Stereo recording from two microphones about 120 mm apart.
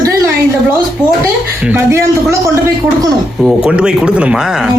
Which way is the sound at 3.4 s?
5° right (ahead or behind).